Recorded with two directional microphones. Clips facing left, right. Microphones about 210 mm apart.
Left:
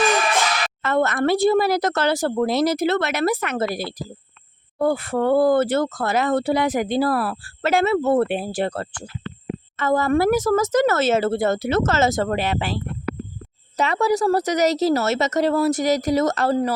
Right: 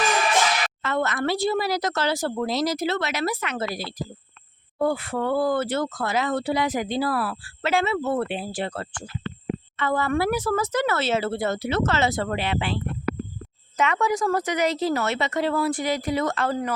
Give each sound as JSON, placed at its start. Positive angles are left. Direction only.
{"t": 0.8, "sound": "a woman's voice", "side_deg": 50}